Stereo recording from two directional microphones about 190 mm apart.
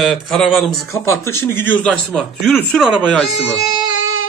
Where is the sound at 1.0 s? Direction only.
15° left (ahead or behind).